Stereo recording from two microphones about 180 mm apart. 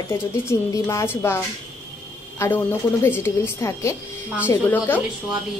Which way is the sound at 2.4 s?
10° left (ahead or behind).